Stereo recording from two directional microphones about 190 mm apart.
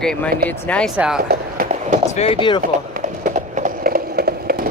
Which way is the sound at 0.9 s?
5° right (ahead or behind).